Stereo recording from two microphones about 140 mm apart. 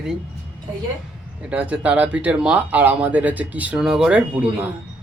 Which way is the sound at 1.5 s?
10° right (ahead or behind).